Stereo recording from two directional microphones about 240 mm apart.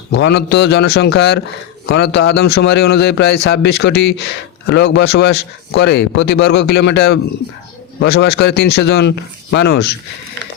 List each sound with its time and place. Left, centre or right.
0.1 s a man's voice: left